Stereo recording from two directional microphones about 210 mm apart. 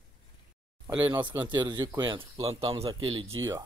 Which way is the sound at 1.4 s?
20° right (ahead or behind).